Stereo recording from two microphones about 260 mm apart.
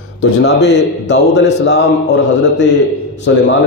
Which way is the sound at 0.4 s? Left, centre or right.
Left.